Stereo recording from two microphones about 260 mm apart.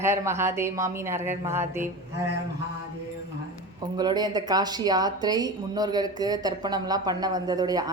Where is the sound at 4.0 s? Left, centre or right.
Centre.